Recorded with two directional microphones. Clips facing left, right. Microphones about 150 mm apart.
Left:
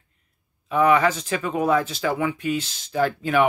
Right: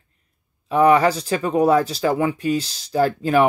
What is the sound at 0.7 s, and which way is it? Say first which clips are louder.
Speech: right 3 dB; 35° right (ahead or behind).